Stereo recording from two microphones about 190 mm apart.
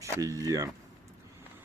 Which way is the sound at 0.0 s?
15° right (ahead or behind).